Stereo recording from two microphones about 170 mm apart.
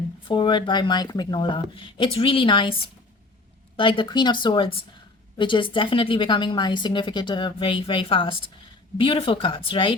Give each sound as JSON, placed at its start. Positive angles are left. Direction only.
{"t": 0.3, "sound": "a woman's voice", "side_deg": 30}
{"t": 3.8, "sound": "a woman's voice", "side_deg": 30}